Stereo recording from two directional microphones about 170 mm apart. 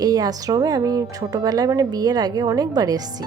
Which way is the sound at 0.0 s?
20° right (ahead or behind).